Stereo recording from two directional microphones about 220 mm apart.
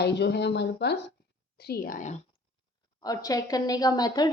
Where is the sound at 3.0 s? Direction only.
15° left (ahead or behind).